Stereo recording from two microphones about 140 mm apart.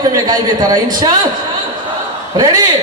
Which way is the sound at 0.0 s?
30° right (ahead or behind).